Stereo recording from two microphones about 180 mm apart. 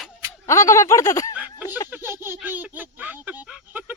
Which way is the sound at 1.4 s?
10° right (ahead or behind).